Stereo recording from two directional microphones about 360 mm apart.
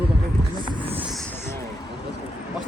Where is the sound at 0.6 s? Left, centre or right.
Centre.